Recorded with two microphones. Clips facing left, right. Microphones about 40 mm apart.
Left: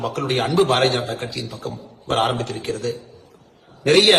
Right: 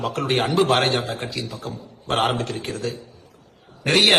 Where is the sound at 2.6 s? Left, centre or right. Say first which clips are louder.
Left 3 dB; right.